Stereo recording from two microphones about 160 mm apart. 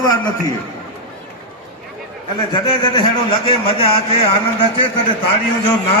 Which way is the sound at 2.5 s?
30° left (ahead or behind).